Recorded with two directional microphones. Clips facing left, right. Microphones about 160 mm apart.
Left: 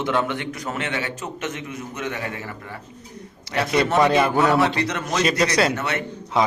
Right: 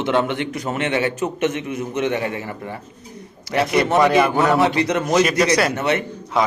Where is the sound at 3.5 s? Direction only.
20° right (ahead or behind).